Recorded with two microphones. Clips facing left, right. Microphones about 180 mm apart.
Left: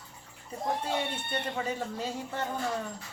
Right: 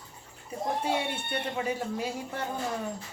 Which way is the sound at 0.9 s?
10° right (ahead or behind).